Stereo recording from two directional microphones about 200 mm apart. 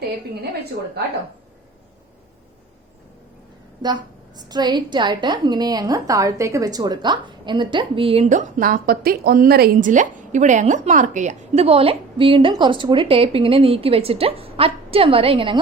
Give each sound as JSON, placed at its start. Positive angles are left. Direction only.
{"t": 3.8, "sound": "a woman's voice", "side_deg": -20}